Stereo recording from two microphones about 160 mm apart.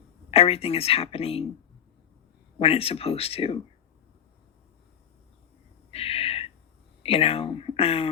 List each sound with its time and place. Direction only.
0.3 s a woman's voice: 35° left (ahead or behind)
2.6 s a woman's voice: 40° left (ahead or behind)
5.9 s gasp: 40° left (ahead or behind)
7.0 s a woman's voice: 40° left (ahead or behind)